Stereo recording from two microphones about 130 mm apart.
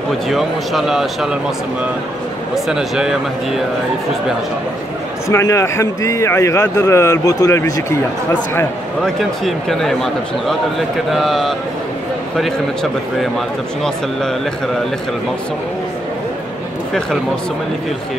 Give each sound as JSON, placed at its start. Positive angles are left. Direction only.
{"t": 0.3, "sound": "a man's voice", "side_deg": 0}
{"t": 2.5, "sound": "a man's voice", "side_deg": -5}
{"t": 5.3, "sound": "a man's voice", "side_deg": 25}
{"t": 8.3, "sound": "a man's voice", "side_deg": 5}